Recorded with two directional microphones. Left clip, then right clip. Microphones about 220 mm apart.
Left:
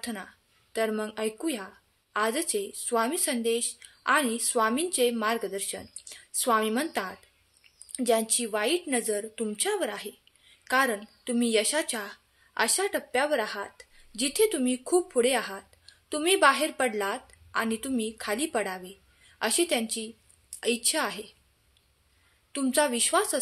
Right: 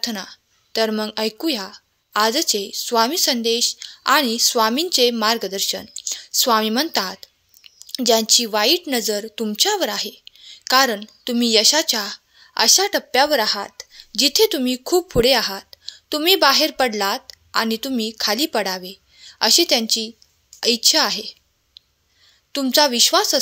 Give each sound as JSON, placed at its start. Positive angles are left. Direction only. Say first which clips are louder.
{"t": 0.0, "sound": "a woman's voice", "louder": "right 11 dB", "side_deg": -40}
{"t": 22.5, "sound": "a woman's voice", "louder": "right 9 dB", "side_deg": -35}